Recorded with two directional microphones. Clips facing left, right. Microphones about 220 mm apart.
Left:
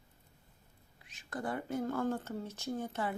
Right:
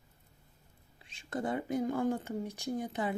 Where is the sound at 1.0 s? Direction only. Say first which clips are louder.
Right 4 dB; 25° right (ahead or behind).